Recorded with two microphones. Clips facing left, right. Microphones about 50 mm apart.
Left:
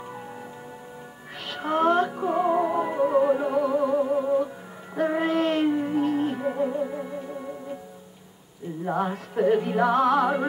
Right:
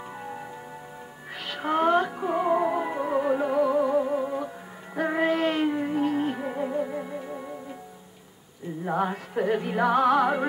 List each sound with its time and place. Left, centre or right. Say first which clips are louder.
1.5 s music: even; centre
8.8 s music: even; centre